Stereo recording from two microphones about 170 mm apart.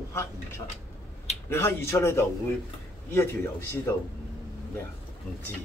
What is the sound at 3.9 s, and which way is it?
Speech, 15° left (ahead or behind).